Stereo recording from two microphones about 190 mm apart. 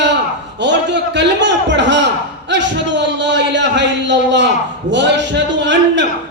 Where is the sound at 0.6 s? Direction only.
70° right (ahead or behind).